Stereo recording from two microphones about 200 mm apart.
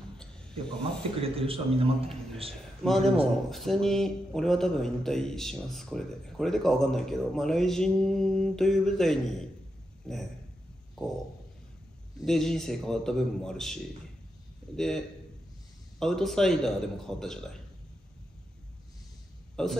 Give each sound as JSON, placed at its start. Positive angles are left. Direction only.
{"t": 0.2, "sound": "a sound", "side_deg": 5}
{"t": 1.2, "sound": "a man's voice", "side_deg": -30}
{"t": 2.8, "sound": "a man's voice", "side_deg": 0}
{"t": 12.2, "sound": "a man's voice", "side_deg": 0}
{"t": 14.8, "sound": "a man's voice", "side_deg": 0}
{"t": 19.5, "sound": "a man's voice", "side_deg": 0}